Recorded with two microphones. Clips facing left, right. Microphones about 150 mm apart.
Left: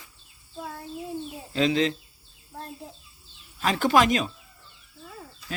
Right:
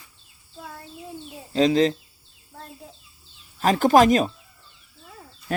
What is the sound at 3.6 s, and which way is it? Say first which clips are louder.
Speech: right 5 dB; 40° right (ahead or behind).